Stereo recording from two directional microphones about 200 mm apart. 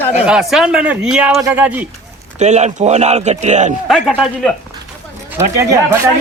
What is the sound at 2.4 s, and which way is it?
Speech, 35° right (ahead or behind).